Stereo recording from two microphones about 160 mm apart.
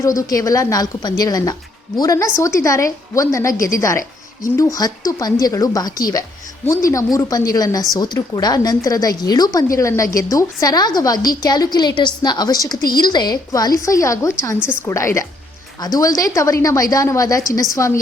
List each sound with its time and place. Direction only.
0.0 s a woman's voice: 20° left (ahead or behind)